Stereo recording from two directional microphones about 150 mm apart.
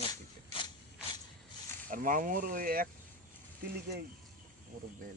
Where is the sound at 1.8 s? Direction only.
65° right (ahead or behind).